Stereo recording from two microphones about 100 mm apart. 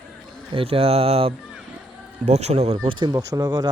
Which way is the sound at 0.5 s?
75° right (ahead or behind).